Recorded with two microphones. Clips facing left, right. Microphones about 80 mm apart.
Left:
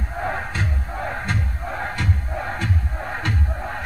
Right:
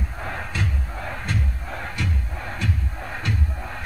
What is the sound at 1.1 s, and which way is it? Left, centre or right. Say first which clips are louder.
Crowd: even; left.